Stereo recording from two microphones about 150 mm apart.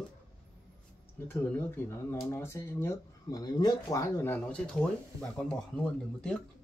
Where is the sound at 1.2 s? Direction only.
15° left (ahead or behind).